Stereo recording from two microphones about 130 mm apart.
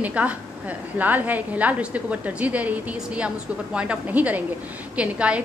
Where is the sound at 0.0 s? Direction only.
10° right (ahead or behind).